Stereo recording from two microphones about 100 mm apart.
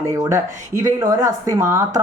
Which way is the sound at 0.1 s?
30° right (ahead or behind).